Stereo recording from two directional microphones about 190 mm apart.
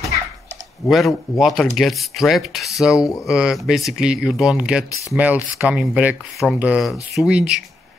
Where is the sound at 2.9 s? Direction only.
15° left (ahead or behind).